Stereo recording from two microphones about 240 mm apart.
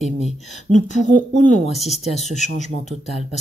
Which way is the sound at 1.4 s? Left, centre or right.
Left.